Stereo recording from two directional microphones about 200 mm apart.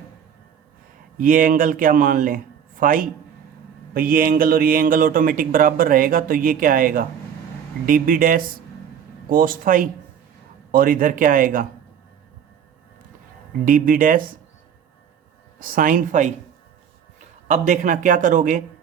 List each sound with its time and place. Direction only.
1.2 s speech: 45° right (ahead or behind)
13.7 s speech: 45° right (ahead or behind)
15.5 s speech: 45° right (ahead or behind)
17.5 s a man's voice: 40° right (ahead or behind)